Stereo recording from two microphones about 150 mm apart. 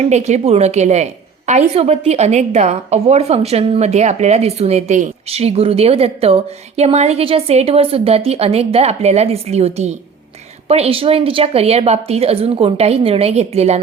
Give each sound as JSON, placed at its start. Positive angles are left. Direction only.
{"t": 0.0, "sound": "a woman's voice", "side_deg": -45}